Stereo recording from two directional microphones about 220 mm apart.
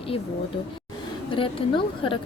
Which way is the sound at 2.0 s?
25° left (ahead or behind).